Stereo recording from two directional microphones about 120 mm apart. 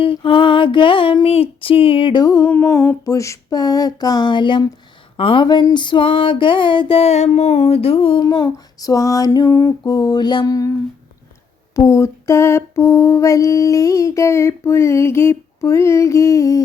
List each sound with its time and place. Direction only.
0.0 s music: 50° left (ahead or behind)
2.2 s mantra: 30° left (ahead or behind)
2.6 s female singing: 25° left (ahead or behind)
5.1 s music: 50° left (ahead or behind)
8.2 s female singing: 35° left (ahead or behind)
11.7 s mantra: 25° left (ahead or behind)